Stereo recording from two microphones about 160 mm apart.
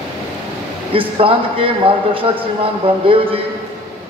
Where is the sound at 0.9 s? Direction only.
35° right (ahead or behind).